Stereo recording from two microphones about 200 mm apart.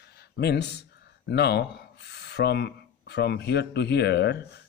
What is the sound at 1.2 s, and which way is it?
Speech, 55° left (ahead or behind).